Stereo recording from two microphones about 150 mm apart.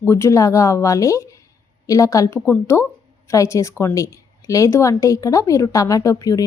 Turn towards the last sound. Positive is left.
turn(degrees=25)  # may be behind; listen again after turning